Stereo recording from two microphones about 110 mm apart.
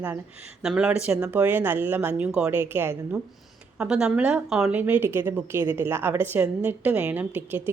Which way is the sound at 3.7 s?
5° right (ahead or behind).